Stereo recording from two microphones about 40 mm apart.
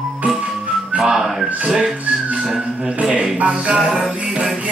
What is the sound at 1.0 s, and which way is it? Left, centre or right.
Music, centre.